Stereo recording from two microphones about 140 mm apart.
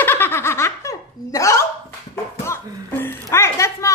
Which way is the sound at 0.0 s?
15° left (ahead or behind).